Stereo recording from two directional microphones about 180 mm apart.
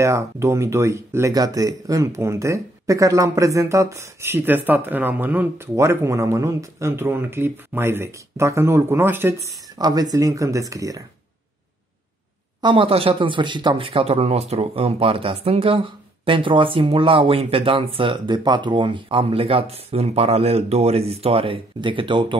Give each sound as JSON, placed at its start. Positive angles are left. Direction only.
{"t": 0.0, "sound": "speech", "side_deg": -15}
{"t": 12.6, "sound": "speech", "side_deg": -30}